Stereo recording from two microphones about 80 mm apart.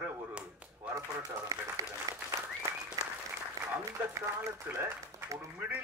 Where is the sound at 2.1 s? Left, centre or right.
Right.